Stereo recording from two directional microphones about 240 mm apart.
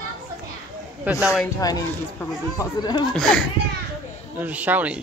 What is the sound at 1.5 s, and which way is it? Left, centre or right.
Speech, centre.